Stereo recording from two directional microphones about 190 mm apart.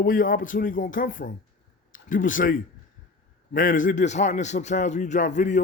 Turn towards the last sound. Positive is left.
turn(degrees=40)  # may be behind; listen again after turning